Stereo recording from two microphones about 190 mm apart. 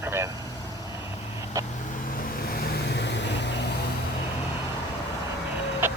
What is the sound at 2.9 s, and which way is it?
Vehicle, 65° left (ahead or behind).